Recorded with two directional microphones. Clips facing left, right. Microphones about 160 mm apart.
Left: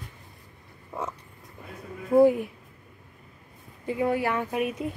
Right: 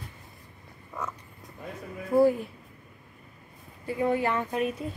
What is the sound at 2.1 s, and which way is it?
Speech, 20° left (ahead or behind).